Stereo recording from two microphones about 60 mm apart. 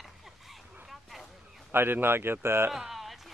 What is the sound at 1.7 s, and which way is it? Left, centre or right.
Speech, right.